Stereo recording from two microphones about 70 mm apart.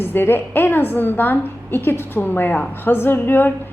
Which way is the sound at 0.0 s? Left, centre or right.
Left.